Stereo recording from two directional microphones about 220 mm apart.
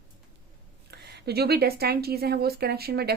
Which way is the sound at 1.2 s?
45° right (ahead or behind).